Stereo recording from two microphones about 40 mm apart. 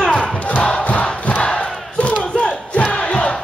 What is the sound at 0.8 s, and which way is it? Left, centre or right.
Crowd, left.